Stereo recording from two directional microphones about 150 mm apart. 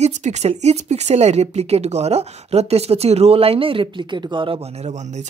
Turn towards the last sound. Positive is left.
turn(degrees=-50)  # may be behind; listen again after turning